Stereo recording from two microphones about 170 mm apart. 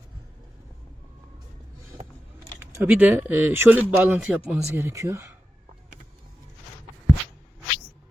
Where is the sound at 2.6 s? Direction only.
15° right (ahead or behind).